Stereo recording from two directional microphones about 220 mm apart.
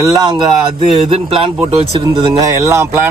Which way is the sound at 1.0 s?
25° right (ahead or behind).